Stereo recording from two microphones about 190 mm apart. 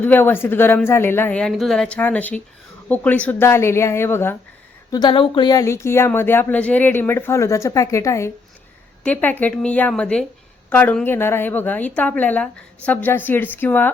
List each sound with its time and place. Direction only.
0.0 s speech: 10° left (ahead or behind)
4.9 s speech: 25° left (ahead or behind)